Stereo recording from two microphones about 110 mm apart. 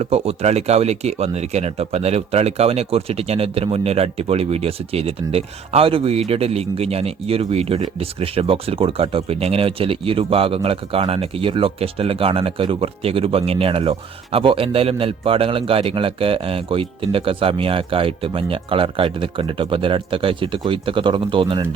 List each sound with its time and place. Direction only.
0.0 s speech: 70° right (ahead or behind); by 21.7 s 50° right (ahead or behind)